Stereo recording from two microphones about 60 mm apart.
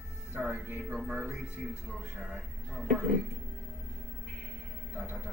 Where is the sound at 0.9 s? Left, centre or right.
Centre.